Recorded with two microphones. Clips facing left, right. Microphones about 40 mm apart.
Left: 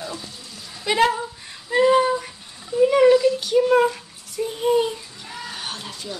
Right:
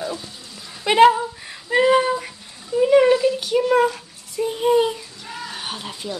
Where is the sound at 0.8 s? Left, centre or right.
Right.